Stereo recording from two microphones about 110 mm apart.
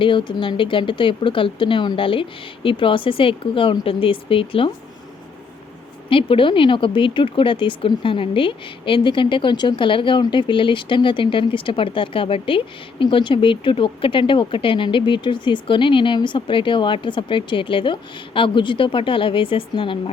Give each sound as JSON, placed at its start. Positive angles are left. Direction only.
{"t": 0.0, "sound": "speech", "side_deg": 50}
{"t": 6.1, "sound": "speech", "side_deg": 55}